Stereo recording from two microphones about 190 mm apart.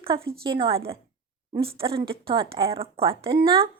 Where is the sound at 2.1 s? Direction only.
30° right (ahead or behind).